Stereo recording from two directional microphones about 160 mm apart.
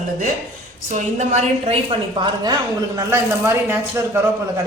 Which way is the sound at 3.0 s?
15° right (ahead or behind).